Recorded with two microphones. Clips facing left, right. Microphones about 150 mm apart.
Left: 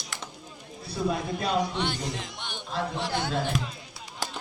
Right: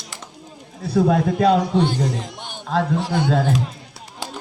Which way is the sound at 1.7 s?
40° right (ahead or behind).